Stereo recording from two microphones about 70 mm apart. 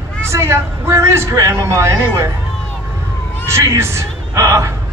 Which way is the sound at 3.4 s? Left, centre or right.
Right.